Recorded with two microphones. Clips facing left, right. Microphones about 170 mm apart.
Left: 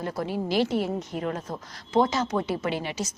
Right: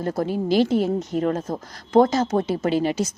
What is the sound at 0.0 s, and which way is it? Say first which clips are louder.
Speech: right 6 dB; 50° right (ahead or behind).